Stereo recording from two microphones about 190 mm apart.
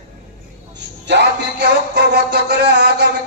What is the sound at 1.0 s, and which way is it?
A man's voice, 65° right (ahead or behind).